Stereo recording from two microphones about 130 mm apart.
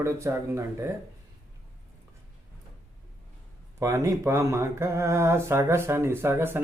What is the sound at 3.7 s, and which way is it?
Speech, 25° right (ahead or behind).